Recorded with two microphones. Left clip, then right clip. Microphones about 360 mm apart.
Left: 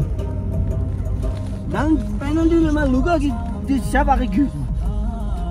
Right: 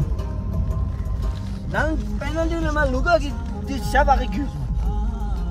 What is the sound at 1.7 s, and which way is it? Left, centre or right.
Speech, right.